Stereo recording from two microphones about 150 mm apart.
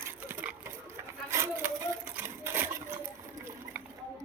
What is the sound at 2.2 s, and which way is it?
Sewing machine, 15° right (ahead or behind).